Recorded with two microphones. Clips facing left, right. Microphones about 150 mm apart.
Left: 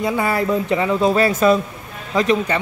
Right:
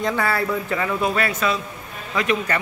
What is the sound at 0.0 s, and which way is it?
A man's voice, 15° left (ahead or behind).